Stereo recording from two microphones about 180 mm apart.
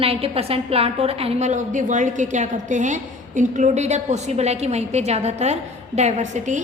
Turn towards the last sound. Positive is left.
turn(degrees=-40)  # may be behind; listen again after turning